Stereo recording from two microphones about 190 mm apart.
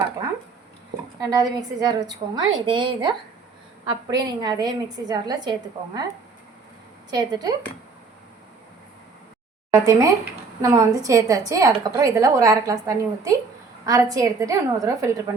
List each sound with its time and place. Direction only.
1.2 s a woman's voice: 20° right (ahead or behind)
4.1 s a woman's voice: 20° right (ahead or behind)
7.1 s a woman's voice: 20° right (ahead or behind)
9.7 s a woman's voice: 20° right (ahead or behind)